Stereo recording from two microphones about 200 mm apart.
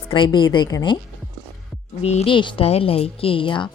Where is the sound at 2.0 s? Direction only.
30° left (ahead or behind).